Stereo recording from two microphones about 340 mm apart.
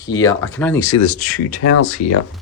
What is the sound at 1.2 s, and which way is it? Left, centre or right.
Speech, right.